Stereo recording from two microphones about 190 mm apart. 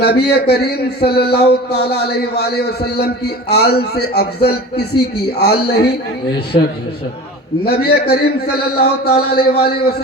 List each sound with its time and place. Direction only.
0.0 s speech: 55° left (ahead or behind)